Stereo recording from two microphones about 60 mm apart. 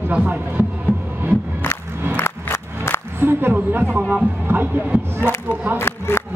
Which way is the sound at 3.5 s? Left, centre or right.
Right.